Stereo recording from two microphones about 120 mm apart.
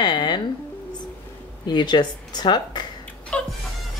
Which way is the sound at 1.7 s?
35° left (ahead or behind).